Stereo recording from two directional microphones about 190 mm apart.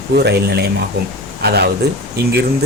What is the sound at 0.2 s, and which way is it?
Speech, 55° right (ahead or behind).